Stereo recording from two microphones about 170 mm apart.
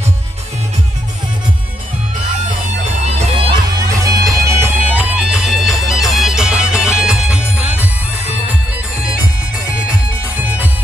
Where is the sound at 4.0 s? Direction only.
20° right (ahead or behind).